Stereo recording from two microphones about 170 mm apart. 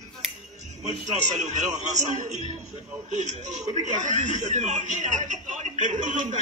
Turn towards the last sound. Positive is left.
turn(degrees=-45)  # may be behind; listen again after turning